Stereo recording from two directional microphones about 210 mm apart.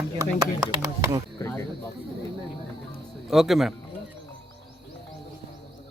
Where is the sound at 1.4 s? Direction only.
15° left (ahead or behind).